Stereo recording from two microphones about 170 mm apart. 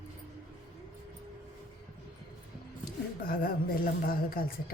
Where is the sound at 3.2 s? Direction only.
60° left (ahead or behind).